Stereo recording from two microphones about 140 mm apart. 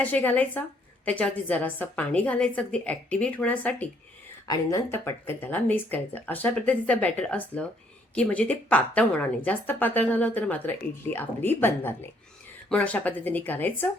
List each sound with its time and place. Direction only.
0.0 s a woman's voice: 10° left (ahead or behind)
4.4 s a woman's voice: 20° left (ahead or behind)